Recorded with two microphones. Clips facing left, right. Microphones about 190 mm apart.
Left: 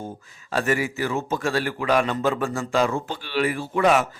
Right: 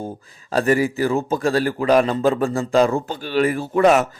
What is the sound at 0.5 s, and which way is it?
A man's voice, 35° right (ahead or behind).